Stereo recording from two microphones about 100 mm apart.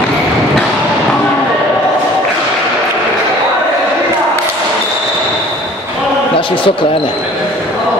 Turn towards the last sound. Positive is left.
turn(degrees=60)  # may be behind; listen again after turning